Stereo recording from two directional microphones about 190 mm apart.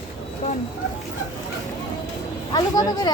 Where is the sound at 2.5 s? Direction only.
20° left (ahead or behind).